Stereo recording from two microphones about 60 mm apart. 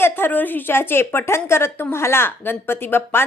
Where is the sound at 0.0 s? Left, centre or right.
Left.